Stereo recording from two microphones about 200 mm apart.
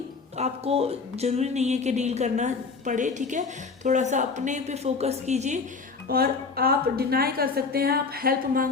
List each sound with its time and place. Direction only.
0.3 s speech: 30° right (ahead or behind)
6.1 s a woman's voice: 50° right (ahead or behind)